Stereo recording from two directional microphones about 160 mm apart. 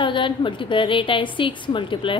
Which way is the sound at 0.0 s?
30° left (ahead or behind).